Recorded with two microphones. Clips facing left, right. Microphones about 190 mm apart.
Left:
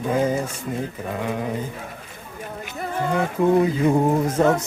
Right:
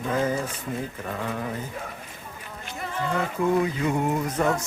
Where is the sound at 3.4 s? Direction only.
25° left (ahead or behind).